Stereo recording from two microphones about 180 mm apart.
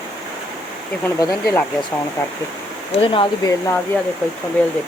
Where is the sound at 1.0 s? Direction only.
15° left (ahead or behind).